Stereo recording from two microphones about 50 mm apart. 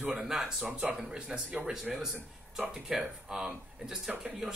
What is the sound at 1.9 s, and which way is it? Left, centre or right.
Speech, centre.